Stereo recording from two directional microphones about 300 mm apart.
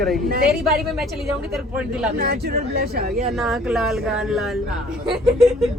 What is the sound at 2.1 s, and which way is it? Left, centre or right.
Speech, right.